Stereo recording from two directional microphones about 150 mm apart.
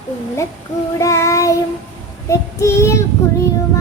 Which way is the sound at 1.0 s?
20° left (ahead or behind).